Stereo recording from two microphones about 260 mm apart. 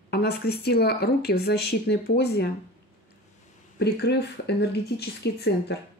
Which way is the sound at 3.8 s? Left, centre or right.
Left.